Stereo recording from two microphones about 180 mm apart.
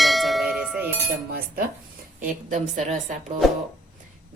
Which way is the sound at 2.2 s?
45° right (ahead or behind).